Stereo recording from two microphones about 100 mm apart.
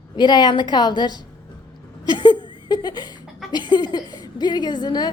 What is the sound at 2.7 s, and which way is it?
A woman's voice, 45° left (ahead or behind).